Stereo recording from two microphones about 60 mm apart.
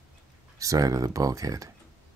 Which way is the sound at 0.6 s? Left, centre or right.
Right.